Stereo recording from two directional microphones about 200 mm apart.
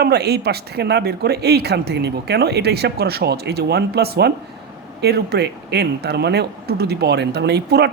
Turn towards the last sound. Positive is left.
turn(degrees=-55)  # may be behind; listen again after turning